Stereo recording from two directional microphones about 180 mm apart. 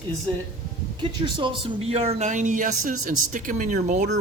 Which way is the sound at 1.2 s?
30° right (ahead or behind).